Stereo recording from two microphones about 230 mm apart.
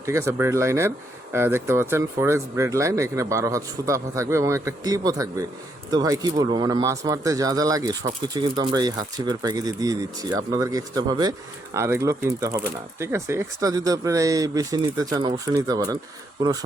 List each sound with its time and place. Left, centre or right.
0.0 s speech: centre